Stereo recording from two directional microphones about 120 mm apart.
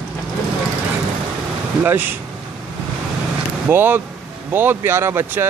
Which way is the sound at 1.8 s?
15° right (ahead or behind).